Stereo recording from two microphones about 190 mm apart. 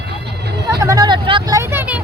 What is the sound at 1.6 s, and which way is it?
Vehicle, 10° right (ahead or behind).